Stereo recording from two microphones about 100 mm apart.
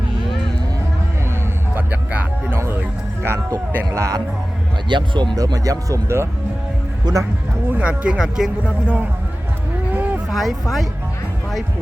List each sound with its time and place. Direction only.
1.7 s music: 20° right (ahead or behind)
3.2 s a sound: 25° right (ahead or behind)
3.9 s speech: 30° right (ahead or behind)
4.9 s speech: 55° right (ahead or behind); by 7.3 s 35° right (ahead or behind)
7.7 s speech: 10° right (ahead or behind)
10.2 s speech: centre (ahead or behind)